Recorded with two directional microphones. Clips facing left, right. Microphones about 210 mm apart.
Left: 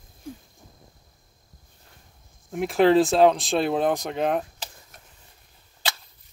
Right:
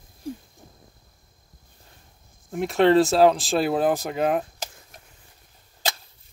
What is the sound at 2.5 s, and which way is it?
Speech, centre (ahead or behind).